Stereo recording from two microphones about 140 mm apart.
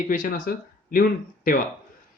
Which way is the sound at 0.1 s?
70° left (ahead or behind).